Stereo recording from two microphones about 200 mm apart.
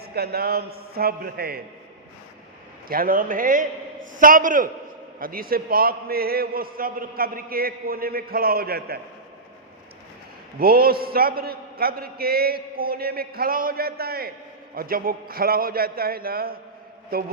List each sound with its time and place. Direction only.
0.0 s a man's voice: 50° right (ahead or behind)
2.9 s a man's voice: 45° right (ahead or behind)
10.6 s a man's voice: 50° right (ahead or behind)